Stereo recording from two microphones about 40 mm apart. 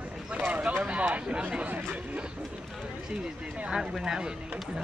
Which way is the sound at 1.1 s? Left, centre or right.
Right.